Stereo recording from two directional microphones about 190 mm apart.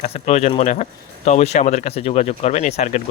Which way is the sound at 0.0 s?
35° left (ahead or behind).